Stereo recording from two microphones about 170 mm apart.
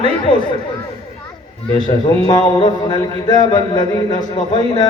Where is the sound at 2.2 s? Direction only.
25° left (ahead or behind).